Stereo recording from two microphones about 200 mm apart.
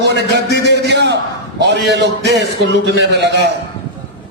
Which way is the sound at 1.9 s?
55° right (ahead or behind).